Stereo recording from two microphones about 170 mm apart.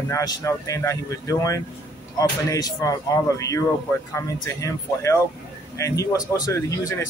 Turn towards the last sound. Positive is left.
turn(degrees=20)  # may be behind; listen again after turning